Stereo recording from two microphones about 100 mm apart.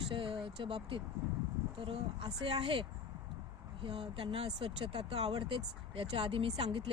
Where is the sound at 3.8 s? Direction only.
65° right (ahead or behind).